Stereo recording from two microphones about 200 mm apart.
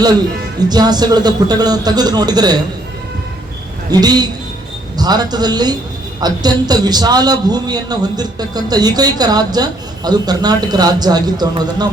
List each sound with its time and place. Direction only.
0.7 s a man's voice: 20° right (ahead or behind)
4.0 s a man's voice: 20° right (ahead or behind)